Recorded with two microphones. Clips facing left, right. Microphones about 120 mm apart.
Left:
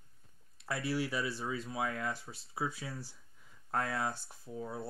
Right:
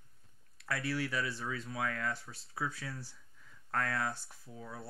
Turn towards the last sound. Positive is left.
turn(degrees=25)  # may be behind; listen again after turning